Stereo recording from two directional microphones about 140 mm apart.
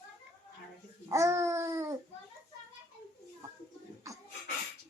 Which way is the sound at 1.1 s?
20° right (ahead or behind).